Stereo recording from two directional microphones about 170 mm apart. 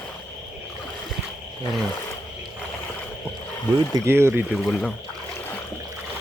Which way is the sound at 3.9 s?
15° right (ahead or behind).